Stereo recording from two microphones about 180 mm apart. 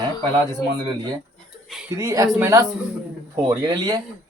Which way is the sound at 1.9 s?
20° right (ahead or behind).